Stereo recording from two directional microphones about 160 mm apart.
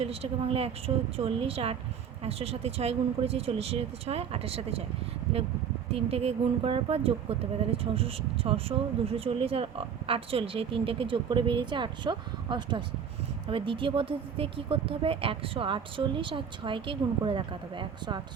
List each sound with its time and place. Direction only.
0.0 s speech: 40° right (ahead or behind)
5.9 s speech: 40° right (ahead or behind)